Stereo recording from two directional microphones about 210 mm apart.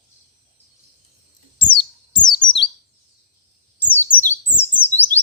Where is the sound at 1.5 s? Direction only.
25° left (ahead or behind).